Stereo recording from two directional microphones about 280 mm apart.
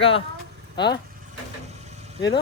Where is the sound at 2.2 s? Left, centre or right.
Centre.